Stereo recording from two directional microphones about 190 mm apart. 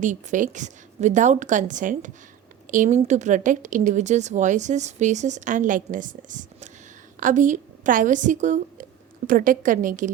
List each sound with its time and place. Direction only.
0.0 s a woman's voice: 40° right (ahead or behind)